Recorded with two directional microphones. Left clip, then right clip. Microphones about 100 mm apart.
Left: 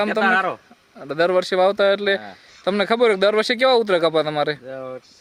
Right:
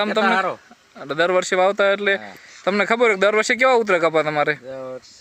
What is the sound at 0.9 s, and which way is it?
Speech, 5° right (ahead or behind).